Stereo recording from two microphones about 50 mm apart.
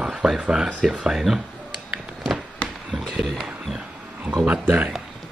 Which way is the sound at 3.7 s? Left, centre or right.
Centre.